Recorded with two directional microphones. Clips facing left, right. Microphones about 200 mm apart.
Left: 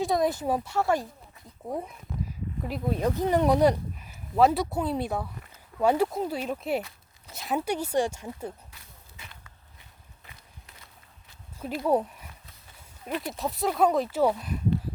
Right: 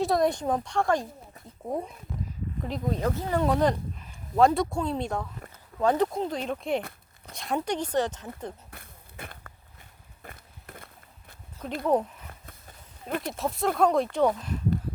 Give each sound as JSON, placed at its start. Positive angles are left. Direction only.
{"t": 0.0, "sound": "speech", "side_deg": 0}
{"t": 2.6, "sound": "speech", "side_deg": 10}
{"t": 8.7, "sound": "a sound", "side_deg": -55}
{"t": 10.2, "sound": "skateboard", "side_deg": -55}
{"t": 11.6, "sound": "speech", "side_deg": 5}
{"t": 12.3, "sound": "horse", "side_deg": -50}
{"t": 13.2, "sound": "speech", "side_deg": 0}